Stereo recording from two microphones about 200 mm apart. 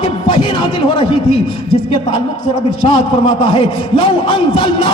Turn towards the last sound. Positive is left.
turn(degrees=25)  # may be behind; listen again after turning